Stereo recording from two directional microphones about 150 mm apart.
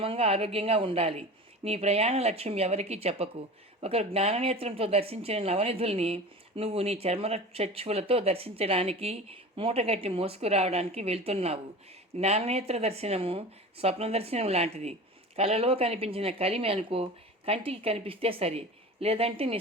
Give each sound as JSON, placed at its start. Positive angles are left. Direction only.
{"t": 0.0, "sound": "speech", "side_deg": -40}